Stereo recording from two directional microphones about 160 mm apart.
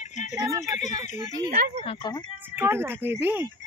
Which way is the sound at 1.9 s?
25° left (ahead or behind).